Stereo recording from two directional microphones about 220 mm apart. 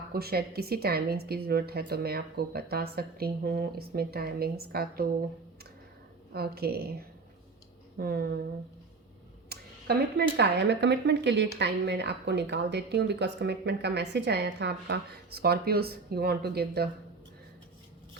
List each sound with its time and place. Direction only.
0.1 s speech: 45° right (ahead or behind)
6.3 s speech: 45° right (ahead or behind)
7.9 s speech: 45° right (ahead or behind)
9.5 s speech: 45° right (ahead or behind)